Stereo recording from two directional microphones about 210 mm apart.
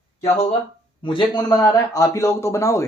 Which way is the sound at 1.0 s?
25° left (ahead or behind).